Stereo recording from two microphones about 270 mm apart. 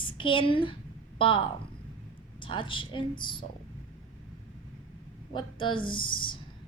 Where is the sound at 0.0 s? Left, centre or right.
Centre.